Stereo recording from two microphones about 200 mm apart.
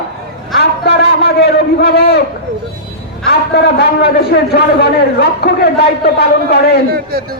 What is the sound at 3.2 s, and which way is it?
A man's voice, 55° left (ahead or behind).